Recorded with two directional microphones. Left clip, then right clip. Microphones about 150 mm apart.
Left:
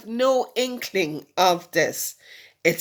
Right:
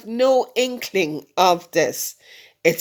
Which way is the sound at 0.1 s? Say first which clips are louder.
Right 4 dB; 25° right (ahead or behind).